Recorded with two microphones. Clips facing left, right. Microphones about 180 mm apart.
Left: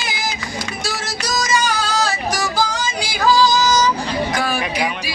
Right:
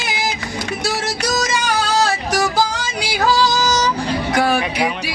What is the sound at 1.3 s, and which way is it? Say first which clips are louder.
Music: left 2 dB; 60° right (ahead or behind).